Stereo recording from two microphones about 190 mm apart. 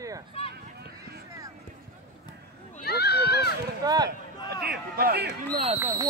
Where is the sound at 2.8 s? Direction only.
60° left (ahead or behind).